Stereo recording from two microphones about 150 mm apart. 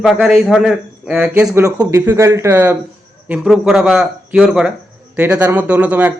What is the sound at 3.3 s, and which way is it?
A man's voice, 5° right (ahead or behind).